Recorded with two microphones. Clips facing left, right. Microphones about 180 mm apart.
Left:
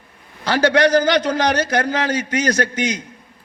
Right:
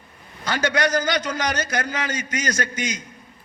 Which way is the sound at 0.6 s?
35° left (ahead or behind).